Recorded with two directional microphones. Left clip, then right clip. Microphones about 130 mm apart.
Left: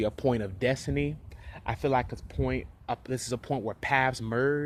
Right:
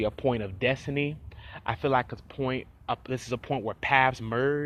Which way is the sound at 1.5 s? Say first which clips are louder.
Right 2 dB; 25° left (ahead or behind).